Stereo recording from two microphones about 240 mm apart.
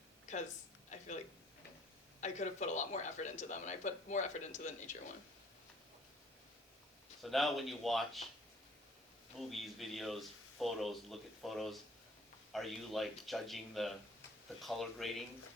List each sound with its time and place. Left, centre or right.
0.3 s speech: left
0.9 s a sound: left
2.2 s speech: left
7.2 s a man's voice: centre
9.4 s a man's voice: centre